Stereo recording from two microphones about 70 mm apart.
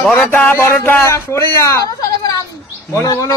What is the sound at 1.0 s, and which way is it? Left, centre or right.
Speech, left.